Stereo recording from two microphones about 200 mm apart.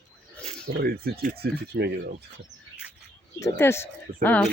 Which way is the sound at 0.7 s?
50° right (ahead or behind).